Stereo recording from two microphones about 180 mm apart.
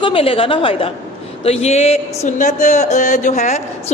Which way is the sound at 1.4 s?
35° left (ahead or behind).